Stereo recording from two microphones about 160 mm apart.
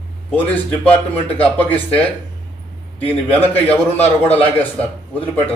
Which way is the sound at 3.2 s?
10° left (ahead or behind).